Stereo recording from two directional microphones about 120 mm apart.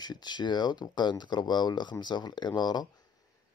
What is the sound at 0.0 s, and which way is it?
Speech, 35° left (ahead or behind).